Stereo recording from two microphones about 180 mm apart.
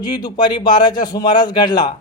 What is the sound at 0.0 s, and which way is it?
A man's voice, 20° left (ahead or behind).